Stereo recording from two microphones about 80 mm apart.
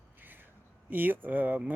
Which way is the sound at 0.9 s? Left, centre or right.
Right.